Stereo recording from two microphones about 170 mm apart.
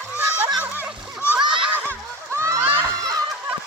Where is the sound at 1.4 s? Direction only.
30° right (ahead or behind).